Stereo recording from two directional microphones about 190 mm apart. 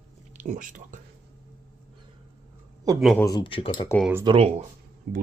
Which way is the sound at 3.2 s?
20° left (ahead or behind).